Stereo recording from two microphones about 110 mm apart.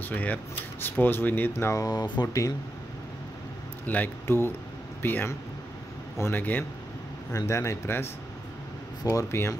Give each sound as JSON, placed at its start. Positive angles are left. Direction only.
{"t": 0.0, "sound": "speech", "side_deg": 15}
{"t": 3.8, "sound": "speech", "side_deg": 15}